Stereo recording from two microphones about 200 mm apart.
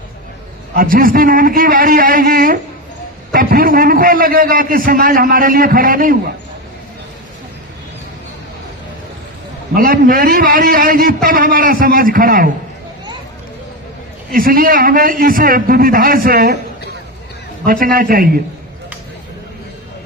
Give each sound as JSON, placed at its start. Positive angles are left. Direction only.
{"t": 0.7, "sound": "a man's voice", "side_deg": -45}
{"t": 9.7, "sound": "a man's voice", "side_deg": -45}
{"t": 14.3, "sound": "a man's voice", "side_deg": -45}
{"t": 17.7, "sound": "a man's voice", "side_deg": -45}